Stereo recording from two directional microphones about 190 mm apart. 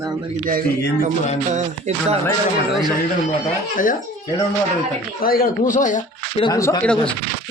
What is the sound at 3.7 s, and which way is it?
Speech, 45° left (ahead or behind).